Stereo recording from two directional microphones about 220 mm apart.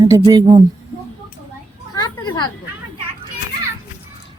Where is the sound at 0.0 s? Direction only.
20° right (ahead or behind).